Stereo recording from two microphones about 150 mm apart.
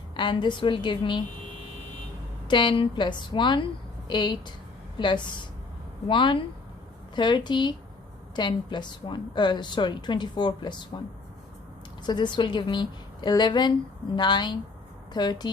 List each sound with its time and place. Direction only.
0.2 s a woman's voice: 30° left (ahead or behind)
2.5 s a woman's voice: 30° left (ahead or behind)
12.0 s a woman's voice: 30° left (ahead or behind)